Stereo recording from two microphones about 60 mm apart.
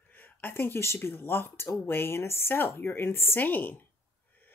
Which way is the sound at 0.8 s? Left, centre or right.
Left.